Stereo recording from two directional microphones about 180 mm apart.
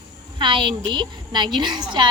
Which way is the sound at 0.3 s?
25° right (ahead or behind).